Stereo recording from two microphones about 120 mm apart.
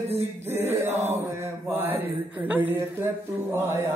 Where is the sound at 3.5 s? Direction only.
20° right (ahead or behind).